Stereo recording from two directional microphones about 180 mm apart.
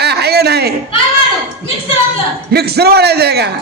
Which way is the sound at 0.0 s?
65° right (ahead or behind).